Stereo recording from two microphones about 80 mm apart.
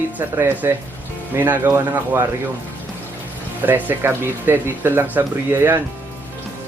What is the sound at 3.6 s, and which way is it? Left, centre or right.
Speech, right.